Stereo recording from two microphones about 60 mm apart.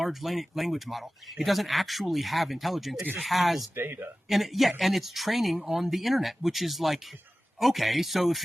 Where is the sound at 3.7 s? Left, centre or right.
Right.